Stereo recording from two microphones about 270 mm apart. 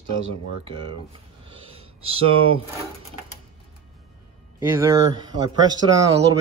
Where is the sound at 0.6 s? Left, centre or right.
Centre.